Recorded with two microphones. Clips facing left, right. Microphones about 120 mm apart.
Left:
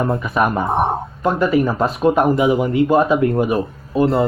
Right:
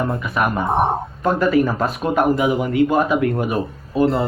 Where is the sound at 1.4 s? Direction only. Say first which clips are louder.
Left 1 dB; 25° left (ahead or behind).